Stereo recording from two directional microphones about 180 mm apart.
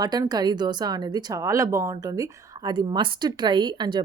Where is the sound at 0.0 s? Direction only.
20° right (ahead or behind).